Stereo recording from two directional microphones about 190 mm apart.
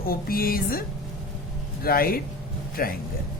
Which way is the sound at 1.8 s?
50° left (ahead or behind).